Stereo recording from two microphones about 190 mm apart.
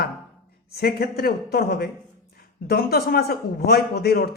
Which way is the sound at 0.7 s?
55° left (ahead or behind).